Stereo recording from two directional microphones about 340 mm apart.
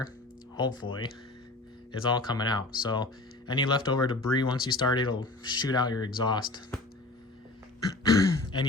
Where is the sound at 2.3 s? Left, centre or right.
Centre.